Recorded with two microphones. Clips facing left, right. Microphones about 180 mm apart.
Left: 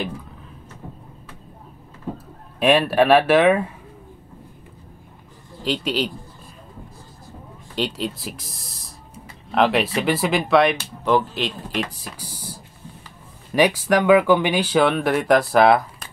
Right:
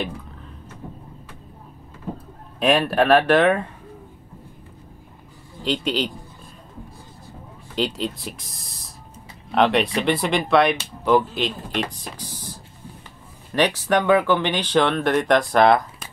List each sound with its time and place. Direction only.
2.6 s speech: centre (ahead or behind)
5.6 s speech: centre (ahead or behind)
7.7 s speech: centre (ahead or behind)